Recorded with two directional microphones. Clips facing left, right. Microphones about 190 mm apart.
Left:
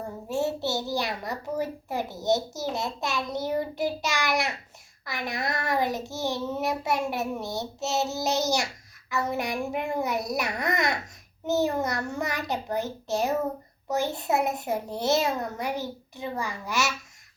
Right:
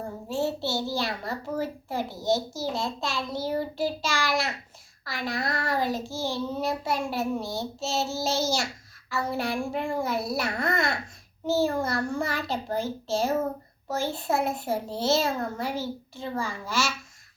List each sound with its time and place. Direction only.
0.3 s a child's voice: 20° left (ahead or behind)